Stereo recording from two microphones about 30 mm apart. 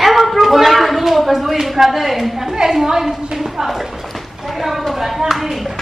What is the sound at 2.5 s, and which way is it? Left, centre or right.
Speech, centre.